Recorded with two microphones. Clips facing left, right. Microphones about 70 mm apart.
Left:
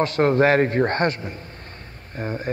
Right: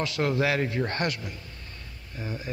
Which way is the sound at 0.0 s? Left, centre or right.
Left.